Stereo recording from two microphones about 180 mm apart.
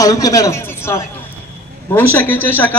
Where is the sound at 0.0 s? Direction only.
20° left (ahead or behind).